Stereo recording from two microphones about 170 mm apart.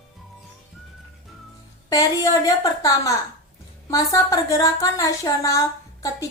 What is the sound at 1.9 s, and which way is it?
A woman's voice, 20° left (ahead or behind).